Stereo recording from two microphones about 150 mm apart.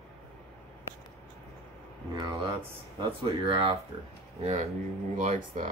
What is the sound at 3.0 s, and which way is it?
Speech, 35° right (ahead or behind).